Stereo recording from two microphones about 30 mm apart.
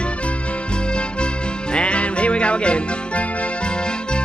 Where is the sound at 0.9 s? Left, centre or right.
Left.